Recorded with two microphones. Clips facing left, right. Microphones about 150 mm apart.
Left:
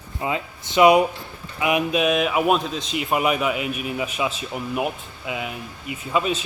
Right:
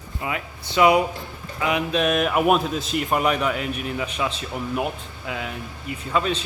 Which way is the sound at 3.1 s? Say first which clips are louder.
Left 1 dB; 10° left (ahead or behind).